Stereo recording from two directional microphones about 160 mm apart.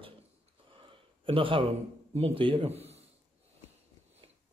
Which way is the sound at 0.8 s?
35° right (ahead or behind).